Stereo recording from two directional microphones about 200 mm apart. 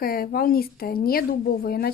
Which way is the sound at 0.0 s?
50° left (ahead or behind).